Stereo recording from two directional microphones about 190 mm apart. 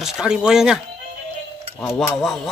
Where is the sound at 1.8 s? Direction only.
Centre (ahead or behind).